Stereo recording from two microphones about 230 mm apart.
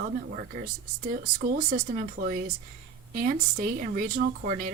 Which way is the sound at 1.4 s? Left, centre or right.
Right.